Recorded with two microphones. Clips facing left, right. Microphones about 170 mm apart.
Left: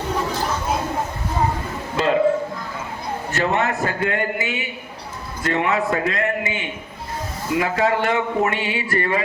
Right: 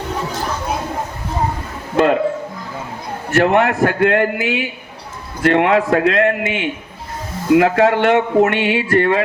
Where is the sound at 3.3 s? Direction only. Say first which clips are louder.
Right 8 dB; 65° right (ahead or behind); by 6.7 s 90° right.